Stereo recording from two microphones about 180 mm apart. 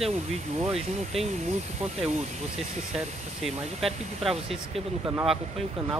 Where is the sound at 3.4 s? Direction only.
Centre (ahead or behind).